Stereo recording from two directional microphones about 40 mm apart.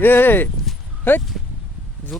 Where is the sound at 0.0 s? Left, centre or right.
Left.